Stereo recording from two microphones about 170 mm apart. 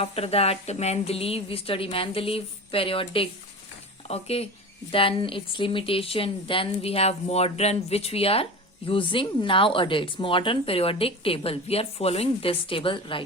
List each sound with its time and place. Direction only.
0.0 s speech: 35° left (ahead or behind)